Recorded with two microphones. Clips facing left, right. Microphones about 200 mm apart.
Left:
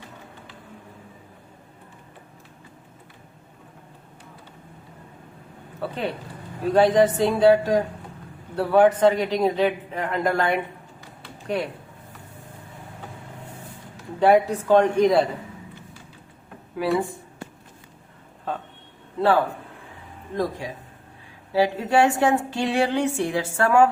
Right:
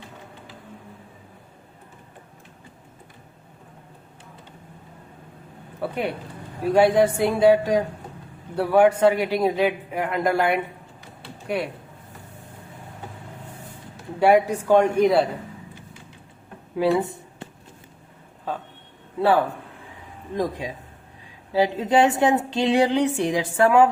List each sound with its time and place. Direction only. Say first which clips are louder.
5.8 s a man's voice: right 2 dB; 10° right (ahead or behind)
14.2 s a man's voice: even; 10° right (ahead or behind)
16.7 s a sound: right 3 dB; 25° right (ahead or behind)
20.3 s a man's voice: right 1 dB; 15° right (ahead or behind)